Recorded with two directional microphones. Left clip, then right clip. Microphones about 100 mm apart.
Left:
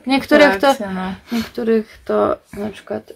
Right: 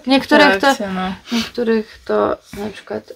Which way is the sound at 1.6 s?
30° left (ahead or behind).